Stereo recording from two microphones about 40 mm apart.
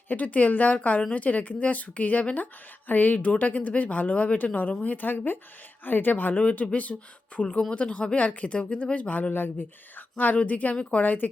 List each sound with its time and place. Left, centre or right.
0.1 s speech: left
6.3 s speech: left
6.9 s speech: centre
7.3 s speech: left
9.3 s speech: left